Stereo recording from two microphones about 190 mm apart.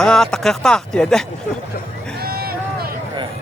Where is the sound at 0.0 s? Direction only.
5° left (ahead or behind).